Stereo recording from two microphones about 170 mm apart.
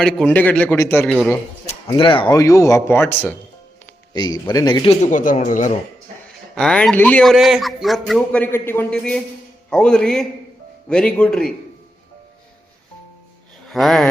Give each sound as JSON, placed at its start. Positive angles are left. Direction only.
{"t": 0.0, "sound": "a man's voice", "side_deg": 5}
{"t": 1.9, "sound": "speech", "side_deg": 30}
{"t": 2.3, "sound": "a man's voice", "side_deg": 20}
{"t": 4.1, "sound": "a man's voice", "side_deg": 25}
{"t": 5.0, "sound": "speech", "side_deg": 50}
{"t": 6.5, "sound": "a man's voice", "side_deg": 5}
{"t": 13.7, "sound": "a sound", "side_deg": 0}